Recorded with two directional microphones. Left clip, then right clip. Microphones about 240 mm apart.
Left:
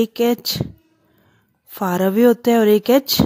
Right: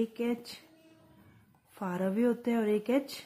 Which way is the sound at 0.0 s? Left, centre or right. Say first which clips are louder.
Left 15 dB; left.